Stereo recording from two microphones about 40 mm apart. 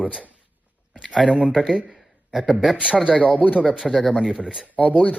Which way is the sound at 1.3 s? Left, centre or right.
Right.